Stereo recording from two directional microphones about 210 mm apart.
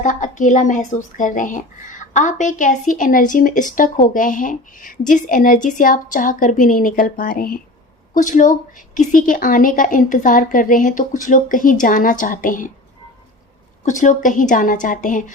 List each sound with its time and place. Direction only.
0.0 s a woman's voice: 40° left (ahead or behind)
13.8 s a woman's voice: 35° left (ahead or behind)